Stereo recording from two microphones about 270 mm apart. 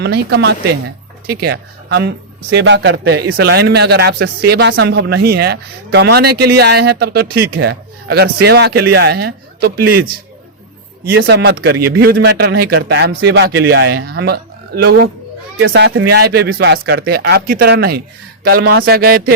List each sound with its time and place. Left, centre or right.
0.0 s speech: right
11.2 s speech: right